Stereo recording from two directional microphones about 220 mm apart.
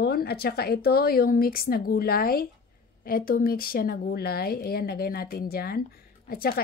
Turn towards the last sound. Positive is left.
turn(degrees=45)  # may be behind; listen again after turning